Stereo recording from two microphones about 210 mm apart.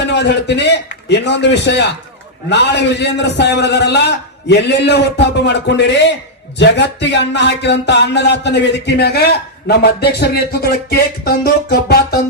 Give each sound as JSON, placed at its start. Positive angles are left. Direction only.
{"t": 0.0, "sound": "a man's voice", "side_deg": 55}